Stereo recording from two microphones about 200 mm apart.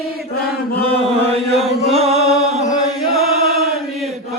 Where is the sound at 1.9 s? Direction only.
30° right (ahead or behind).